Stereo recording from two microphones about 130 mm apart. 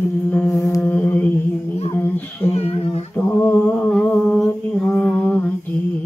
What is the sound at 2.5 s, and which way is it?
Humming, 50° left (ahead or behind).